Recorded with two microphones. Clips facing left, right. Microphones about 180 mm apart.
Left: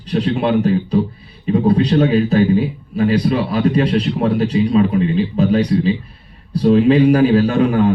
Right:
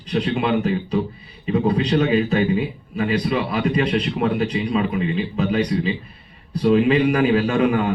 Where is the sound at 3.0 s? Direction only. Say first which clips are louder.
Left 5 dB; 35° left (ahead or behind).